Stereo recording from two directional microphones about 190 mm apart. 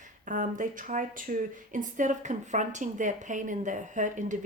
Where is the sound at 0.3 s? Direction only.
40° right (ahead or behind).